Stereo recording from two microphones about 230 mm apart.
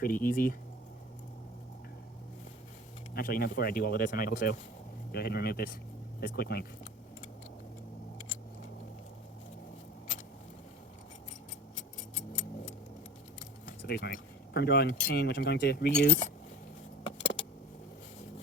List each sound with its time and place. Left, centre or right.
0.0 s speech: left
3.2 s speech: left
12.1 s clock: left
13.7 s vehicle: left
15.0 s speech: left
17.1 s keys jangling: left